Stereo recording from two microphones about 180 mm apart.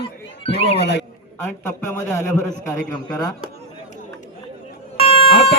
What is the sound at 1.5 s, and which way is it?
Speech, 15° left (ahead or behind).